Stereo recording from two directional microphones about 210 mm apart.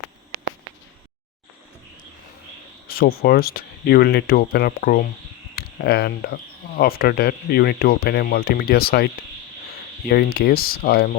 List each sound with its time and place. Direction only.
2.8 s speech: 45° left (ahead or behind)
10.1 s speech: 50° left (ahead or behind)